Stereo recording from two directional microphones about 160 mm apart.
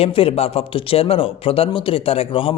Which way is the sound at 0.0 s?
35° left (ahead or behind).